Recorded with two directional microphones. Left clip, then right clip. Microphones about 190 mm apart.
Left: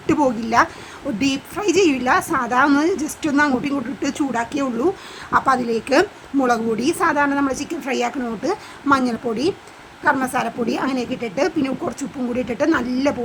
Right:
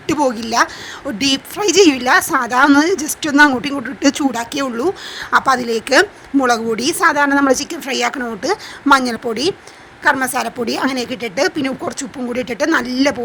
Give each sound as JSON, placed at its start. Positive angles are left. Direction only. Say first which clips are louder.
{"t": 0.1, "sound": "a woman's voice", "louder": "right 1 dB", "side_deg": -35}